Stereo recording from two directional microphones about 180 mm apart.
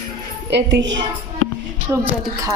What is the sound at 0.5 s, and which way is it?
Speech, 85° right.